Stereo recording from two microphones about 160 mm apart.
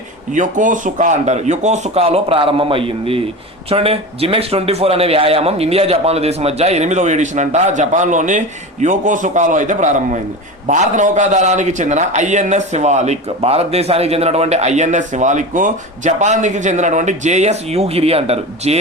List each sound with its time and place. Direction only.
0.3 s a man's voice: 55° right (ahead or behind)